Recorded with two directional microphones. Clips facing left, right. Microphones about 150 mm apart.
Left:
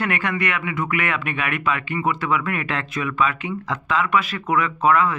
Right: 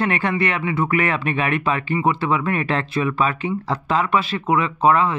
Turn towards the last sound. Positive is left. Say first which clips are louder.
# right 2 dB
turn(degrees=-30)  # may be behind; listen again after turning